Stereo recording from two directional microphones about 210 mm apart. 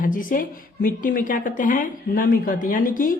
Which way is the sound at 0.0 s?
40° left (ahead or behind).